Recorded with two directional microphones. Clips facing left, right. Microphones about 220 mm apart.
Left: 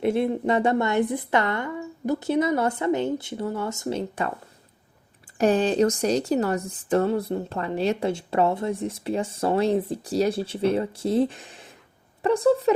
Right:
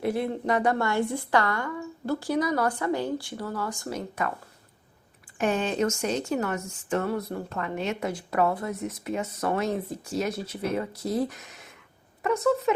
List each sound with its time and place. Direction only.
0.0 s a woman's voice: 25° left (ahead or behind)
5.4 s speech: 35° left (ahead or behind)